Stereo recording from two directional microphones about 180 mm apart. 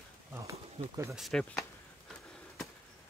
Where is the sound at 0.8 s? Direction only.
30° right (ahead or behind).